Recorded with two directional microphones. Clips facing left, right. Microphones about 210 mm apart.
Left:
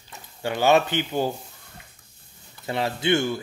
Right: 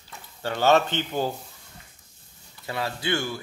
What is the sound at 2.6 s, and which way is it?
Speech, 25° left (ahead or behind).